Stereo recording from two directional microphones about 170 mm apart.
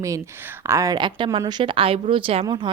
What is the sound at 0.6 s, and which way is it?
A woman's voice, 15° right (ahead or behind).